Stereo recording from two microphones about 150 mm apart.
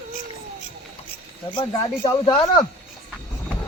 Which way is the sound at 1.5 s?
30° left (ahead or behind).